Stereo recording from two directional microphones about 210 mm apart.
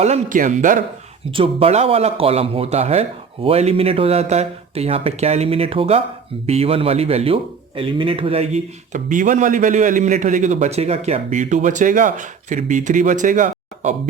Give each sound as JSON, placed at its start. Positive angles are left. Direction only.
{"t": 0.0, "sound": "a man's voice", "side_deg": -35}
{"t": 1.3, "sound": "a man's voice", "side_deg": -25}